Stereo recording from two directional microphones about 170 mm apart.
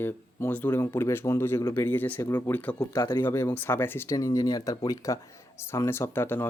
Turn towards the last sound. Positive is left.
turn(degrees=10)  # may be behind; listen again after turning